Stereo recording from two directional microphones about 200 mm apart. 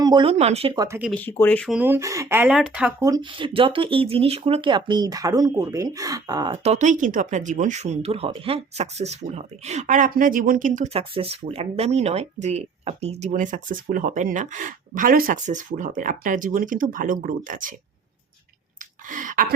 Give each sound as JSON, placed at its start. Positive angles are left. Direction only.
{"t": 0.0, "sound": "speech", "side_deg": -20}
{"t": 0.8, "sound": "speech", "side_deg": -10}
{"t": 1.1, "sound": "speech", "side_deg": 10}
{"t": 1.7, "sound": "speech", "side_deg": -10}
{"t": 3.0, "sound": "speech", "side_deg": -20}
{"t": 6.6, "sound": "speech", "side_deg": -35}
{"t": 19.0, "sound": "gasp", "side_deg": -40}